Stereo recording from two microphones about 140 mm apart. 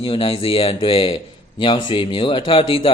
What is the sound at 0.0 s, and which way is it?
Speech, 40° left (ahead or behind).